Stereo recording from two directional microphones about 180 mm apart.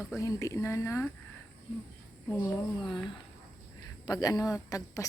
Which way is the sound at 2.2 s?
10° left (ahead or behind).